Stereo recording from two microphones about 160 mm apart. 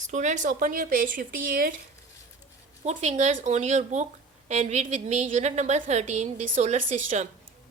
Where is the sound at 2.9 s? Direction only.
45° right (ahead or behind).